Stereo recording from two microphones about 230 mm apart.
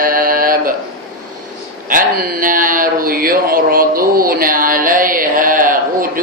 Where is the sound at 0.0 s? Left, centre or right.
Right.